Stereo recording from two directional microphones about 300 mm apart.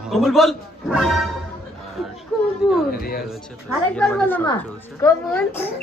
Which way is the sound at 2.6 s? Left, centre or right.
Centre.